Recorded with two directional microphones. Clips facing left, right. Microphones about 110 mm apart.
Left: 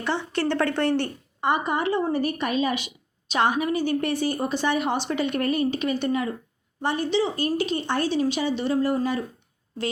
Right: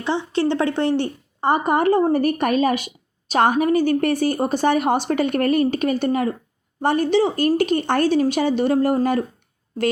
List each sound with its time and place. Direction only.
0.0 s a woman's voice: 20° right (ahead or behind)
1.4 s a woman's voice: 40° right (ahead or behind)